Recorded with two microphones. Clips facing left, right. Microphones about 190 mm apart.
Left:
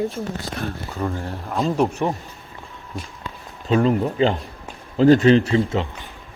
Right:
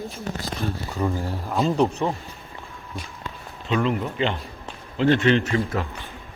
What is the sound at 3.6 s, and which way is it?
Speech, 35° left (ahead or behind).